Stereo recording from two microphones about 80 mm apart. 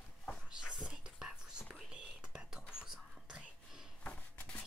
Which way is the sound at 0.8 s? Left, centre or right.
Centre.